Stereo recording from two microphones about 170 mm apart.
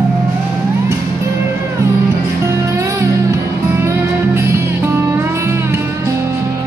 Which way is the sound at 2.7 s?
15° right (ahead or behind).